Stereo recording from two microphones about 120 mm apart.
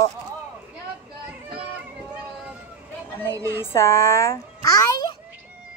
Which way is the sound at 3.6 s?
20° left (ahead or behind).